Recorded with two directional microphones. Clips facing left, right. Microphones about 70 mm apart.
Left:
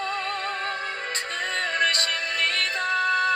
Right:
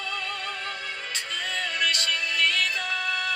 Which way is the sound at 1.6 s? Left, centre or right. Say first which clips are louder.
Left 4 dB; left.